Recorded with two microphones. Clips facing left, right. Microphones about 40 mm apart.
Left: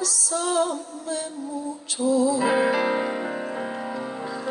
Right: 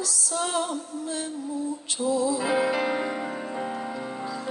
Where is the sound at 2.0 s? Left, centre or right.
Centre.